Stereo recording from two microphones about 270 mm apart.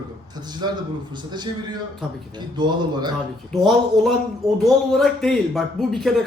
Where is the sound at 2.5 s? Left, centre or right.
Centre.